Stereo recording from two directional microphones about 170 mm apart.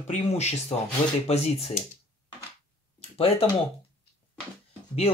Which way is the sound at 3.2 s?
35° left (ahead or behind).